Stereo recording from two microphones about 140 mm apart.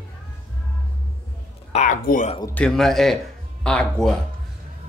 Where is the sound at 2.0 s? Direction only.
90° left.